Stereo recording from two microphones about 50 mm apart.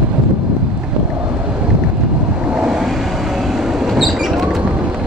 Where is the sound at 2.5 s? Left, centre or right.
Centre.